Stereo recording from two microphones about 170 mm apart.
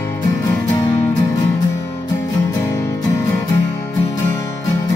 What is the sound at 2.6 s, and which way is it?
Music, 20° left (ahead or behind).